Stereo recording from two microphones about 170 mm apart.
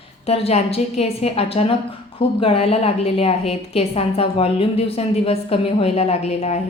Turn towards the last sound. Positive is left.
turn(degrees=40)  # may be behind; listen again after turning